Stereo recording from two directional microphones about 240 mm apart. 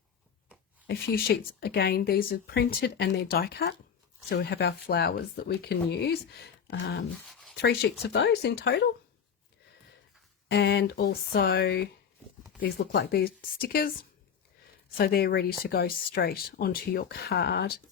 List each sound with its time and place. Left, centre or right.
0.9 s speech: left
10.5 s speech: left
14.9 s speech: left